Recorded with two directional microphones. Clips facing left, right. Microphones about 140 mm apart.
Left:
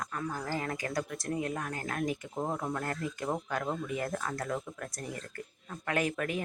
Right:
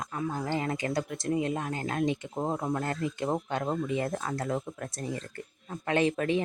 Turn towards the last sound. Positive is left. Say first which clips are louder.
# right 6 dB
turn(degrees=-25)  # may be behind; listen again after turning